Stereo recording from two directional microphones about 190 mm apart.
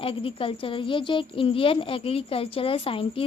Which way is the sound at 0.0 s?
30° left (ahead or behind).